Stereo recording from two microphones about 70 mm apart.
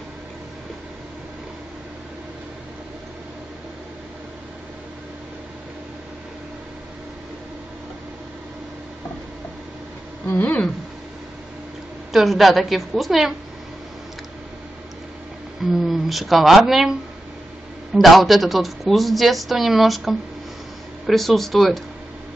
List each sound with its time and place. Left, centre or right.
10.4 s a sound: left
12.1 s a woman's voice: centre
15.6 s speech: centre
17.9 s a woman's voice: centre